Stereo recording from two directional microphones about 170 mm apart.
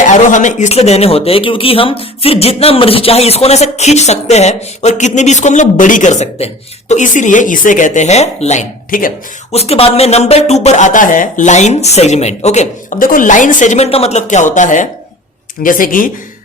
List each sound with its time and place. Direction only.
0.1 s speech: 45° left (ahead or behind)
9.5 s speech: 35° left (ahead or behind); by 16.0 s 55° left (ahead or behind)